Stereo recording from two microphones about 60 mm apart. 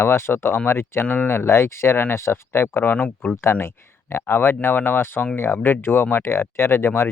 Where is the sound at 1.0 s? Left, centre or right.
Left.